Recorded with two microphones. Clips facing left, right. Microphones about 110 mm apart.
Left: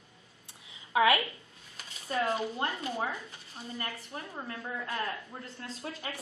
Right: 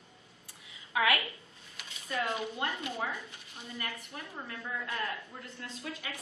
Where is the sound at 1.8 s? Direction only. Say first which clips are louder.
Left 3 dB; 35° left (ahead or behind).